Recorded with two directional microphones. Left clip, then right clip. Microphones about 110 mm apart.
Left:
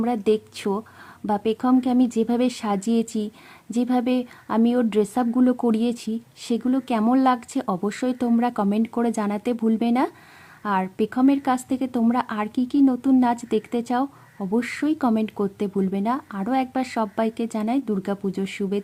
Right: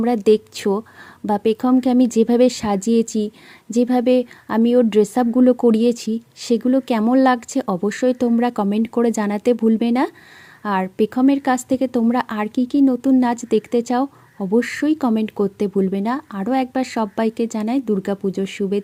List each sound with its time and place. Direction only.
0.0 s speech: 30° right (ahead or behind)